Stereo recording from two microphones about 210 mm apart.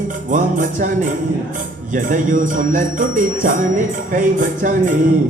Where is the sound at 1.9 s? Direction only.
40° right (ahead or behind).